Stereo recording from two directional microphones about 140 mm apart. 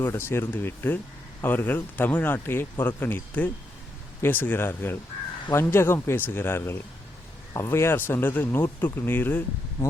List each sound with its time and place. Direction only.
0.0 s speech: 20° left (ahead or behind)